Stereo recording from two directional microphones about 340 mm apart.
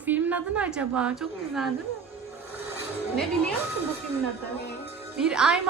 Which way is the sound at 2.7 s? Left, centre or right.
Centre.